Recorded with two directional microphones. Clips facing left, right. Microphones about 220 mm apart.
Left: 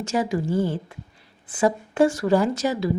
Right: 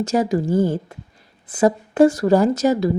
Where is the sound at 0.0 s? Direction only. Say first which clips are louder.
Right 5 dB; 40° right (ahead or behind).